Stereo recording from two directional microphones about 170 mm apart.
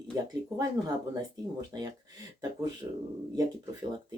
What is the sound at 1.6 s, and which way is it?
Speech, 25° right (ahead or behind).